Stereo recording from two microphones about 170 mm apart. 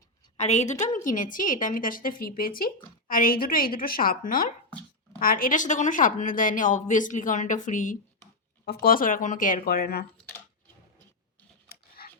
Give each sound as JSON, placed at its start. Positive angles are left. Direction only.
{"t": 0.3, "sound": "a woman's voice", "side_deg": 40}
{"t": 8.6, "sound": "a woman's voice", "side_deg": 65}
{"t": 11.7, "sound": "a sound", "side_deg": 60}